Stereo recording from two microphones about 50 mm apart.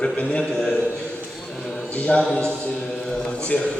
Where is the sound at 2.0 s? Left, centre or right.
Left.